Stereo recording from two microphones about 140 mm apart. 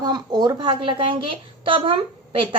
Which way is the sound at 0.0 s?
30° right (ahead or behind).